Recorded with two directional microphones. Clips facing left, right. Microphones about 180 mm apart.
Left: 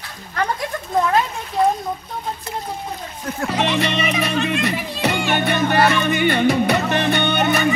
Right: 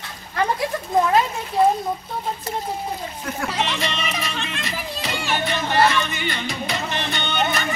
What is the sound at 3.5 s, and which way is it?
Speech, 60° left (ahead or behind).